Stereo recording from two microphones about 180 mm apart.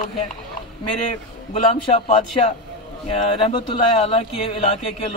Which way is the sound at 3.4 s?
30° left (ahead or behind).